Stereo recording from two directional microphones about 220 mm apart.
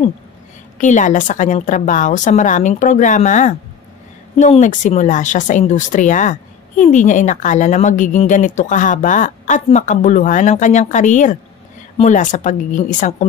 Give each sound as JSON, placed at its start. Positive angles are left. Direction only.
{"t": 0.7, "sound": "a woman's voice", "side_deg": 35}